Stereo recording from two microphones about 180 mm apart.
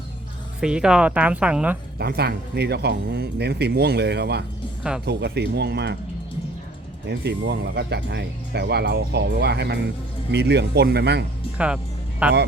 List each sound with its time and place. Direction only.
0.6 s speech: 5° right (ahead or behind)
2.0 s speech: 60° right (ahead or behind)
4.8 s speech: 5° right (ahead or behind)
5.0 s speech: 70° right (ahead or behind)
7.1 s speech: 70° right (ahead or behind)
11.5 s speech: 5° right (ahead or behind)